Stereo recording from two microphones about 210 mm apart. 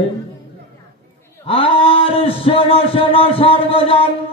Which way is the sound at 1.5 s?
25° left (ahead or behind).